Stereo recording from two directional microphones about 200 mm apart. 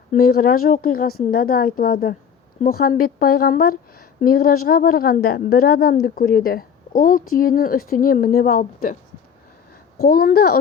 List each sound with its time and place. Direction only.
0.2 s a woman's voice: 50° left (ahead or behind)
10.0 s a woman's voice: 50° left (ahead or behind)